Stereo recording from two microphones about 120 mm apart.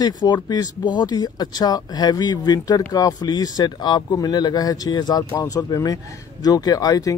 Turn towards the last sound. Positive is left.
turn(degrees=30)  # may be behind; listen again after turning